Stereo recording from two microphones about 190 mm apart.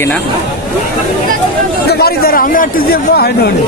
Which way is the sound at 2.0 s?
50° left (ahead or behind).